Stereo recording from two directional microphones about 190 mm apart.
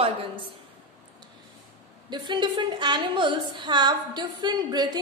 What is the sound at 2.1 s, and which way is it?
A woman's voice, 25° right (ahead or behind).